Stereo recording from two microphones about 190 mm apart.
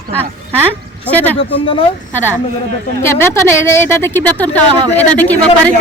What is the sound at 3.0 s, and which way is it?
A woman's voice, 15° left (ahead or behind).